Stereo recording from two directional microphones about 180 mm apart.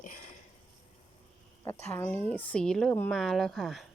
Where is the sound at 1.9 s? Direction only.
10° left (ahead or behind).